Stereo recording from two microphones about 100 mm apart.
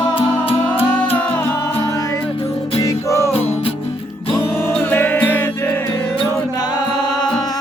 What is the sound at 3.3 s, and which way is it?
Music, 80° left.